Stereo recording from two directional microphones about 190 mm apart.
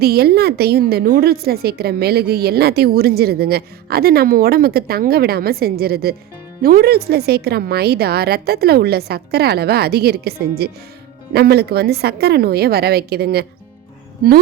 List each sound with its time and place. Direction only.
0.0 s a woman's voice: 55° right (ahead or behind)